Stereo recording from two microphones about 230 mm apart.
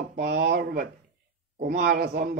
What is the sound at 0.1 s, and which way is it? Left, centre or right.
Speech, right.